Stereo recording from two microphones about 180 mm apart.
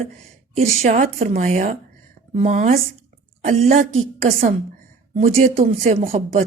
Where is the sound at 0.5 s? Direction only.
35° right (ahead or behind).